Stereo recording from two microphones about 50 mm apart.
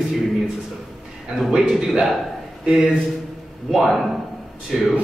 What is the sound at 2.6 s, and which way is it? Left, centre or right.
Speech, centre.